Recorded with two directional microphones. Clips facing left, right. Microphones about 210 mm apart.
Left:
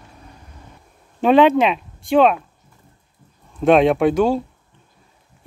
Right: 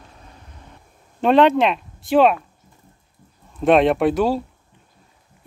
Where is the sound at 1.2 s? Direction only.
Centre (ahead or behind).